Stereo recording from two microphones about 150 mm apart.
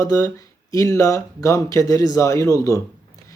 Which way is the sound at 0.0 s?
25° left (ahead or behind).